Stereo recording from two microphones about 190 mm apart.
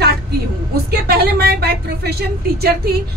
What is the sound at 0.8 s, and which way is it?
Speech, 55° right (ahead or behind).